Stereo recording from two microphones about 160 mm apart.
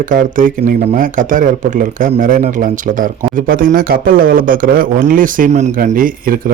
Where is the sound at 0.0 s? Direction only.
55° right (ahead or behind).